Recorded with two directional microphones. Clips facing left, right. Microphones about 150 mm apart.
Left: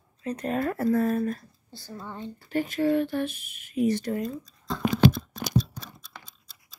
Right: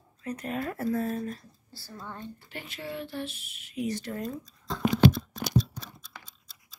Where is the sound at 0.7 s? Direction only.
65° left (ahead or behind).